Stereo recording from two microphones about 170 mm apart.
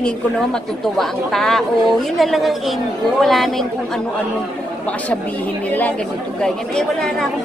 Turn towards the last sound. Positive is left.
turn(degrees=5)  # may be behind; listen again after turning